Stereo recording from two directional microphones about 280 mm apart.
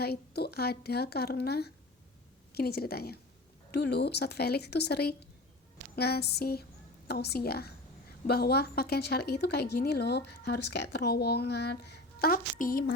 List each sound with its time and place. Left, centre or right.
0.0 s a woman's voice: left